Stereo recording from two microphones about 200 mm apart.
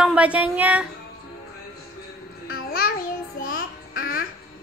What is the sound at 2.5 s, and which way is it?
Babbling, 50° left (ahead or behind).